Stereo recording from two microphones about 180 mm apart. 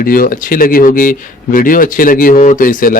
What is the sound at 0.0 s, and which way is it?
Speech, 55° left (ahead or behind).